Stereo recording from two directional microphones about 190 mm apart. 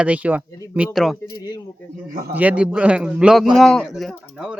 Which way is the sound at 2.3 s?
5° right (ahead or behind).